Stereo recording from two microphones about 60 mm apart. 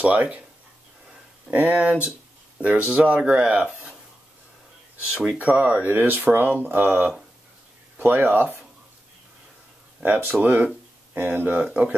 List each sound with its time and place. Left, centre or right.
0.0 s speech: right
1.5 s speech: right
5.1 s speech: centre
5.4 s speech: right
10.0 s speech: right